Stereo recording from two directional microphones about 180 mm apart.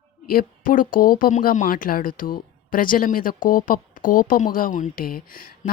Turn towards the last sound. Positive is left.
turn(degrees=50)  # may be behind; listen again after turning